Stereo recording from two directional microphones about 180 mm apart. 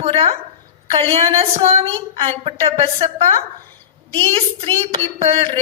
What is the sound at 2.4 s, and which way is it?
A woman's voice, 35° right (ahead or behind).